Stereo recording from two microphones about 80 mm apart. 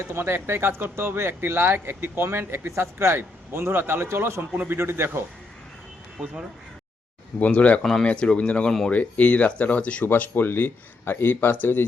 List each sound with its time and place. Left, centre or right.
0.0 s speech: right
6.1 s speech: centre
7.3 s speech: centre
7.8 s speech: centre; by 11.9 s left